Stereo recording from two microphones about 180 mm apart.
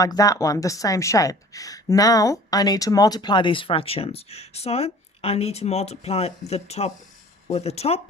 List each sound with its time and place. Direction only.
0.0 s speech: 20° left (ahead or behind); by 8.0 s 35° left (ahead or behind)